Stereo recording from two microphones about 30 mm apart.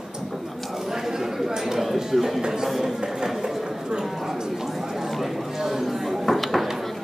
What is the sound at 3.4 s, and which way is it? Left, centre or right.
Chatter, right.